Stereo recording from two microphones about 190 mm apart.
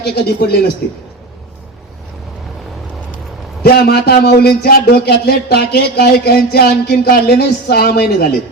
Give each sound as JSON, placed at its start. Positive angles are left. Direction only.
{"t": 0.0, "sound": "a man's voice", "side_deg": 55}
{"t": 3.6, "sound": "a man's voice", "side_deg": 55}